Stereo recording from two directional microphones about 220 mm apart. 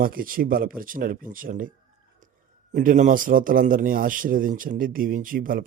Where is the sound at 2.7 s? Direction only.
35° right (ahead or behind).